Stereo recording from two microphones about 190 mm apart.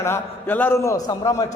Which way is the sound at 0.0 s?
10° left (ahead or behind).